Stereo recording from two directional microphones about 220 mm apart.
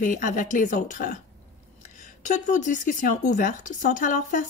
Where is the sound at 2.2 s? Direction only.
35° left (ahead or behind).